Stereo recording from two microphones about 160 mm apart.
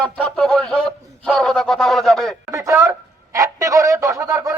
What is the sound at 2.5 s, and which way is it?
Speech, 20° right (ahead or behind).